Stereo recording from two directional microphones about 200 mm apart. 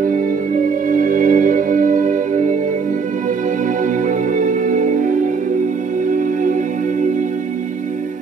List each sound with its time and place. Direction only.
0.0 s music: 40° right (ahead or behind)
4.4 s music: 40° right (ahead or behind)